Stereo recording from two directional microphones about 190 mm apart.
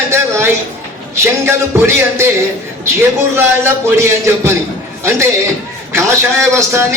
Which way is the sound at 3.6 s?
15° right (ahead or behind).